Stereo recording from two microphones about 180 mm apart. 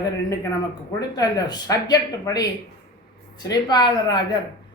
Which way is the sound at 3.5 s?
25° left (ahead or behind).